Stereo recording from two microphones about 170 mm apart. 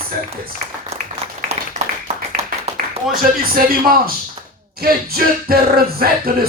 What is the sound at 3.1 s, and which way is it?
Music, 60° right (ahead or behind).